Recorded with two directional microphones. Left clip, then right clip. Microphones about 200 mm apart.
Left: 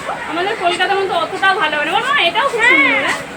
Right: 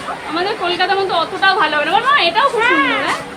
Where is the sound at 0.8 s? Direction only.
5° right (ahead or behind).